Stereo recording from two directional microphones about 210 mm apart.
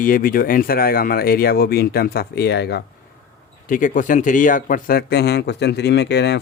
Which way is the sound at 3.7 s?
40° left (ahead or behind).